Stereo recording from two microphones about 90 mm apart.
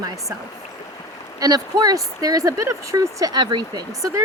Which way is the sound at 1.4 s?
45° right (ahead or behind).